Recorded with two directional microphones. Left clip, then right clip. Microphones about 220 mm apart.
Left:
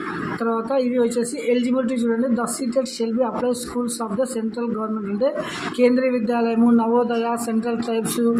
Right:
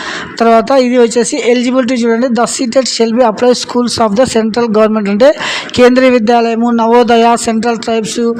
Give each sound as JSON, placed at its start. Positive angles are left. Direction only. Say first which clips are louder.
{"t": 0.4, "sound": "speech", "louder": "right 15 dB", "side_deg": -45}